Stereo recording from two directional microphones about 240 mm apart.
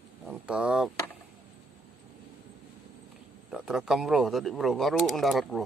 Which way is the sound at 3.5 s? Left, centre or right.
Centre.